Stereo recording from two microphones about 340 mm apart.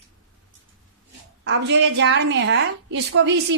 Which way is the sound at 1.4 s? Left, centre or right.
Right.